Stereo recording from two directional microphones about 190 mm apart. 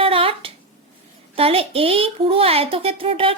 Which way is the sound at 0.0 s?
30° right (ahead or behind).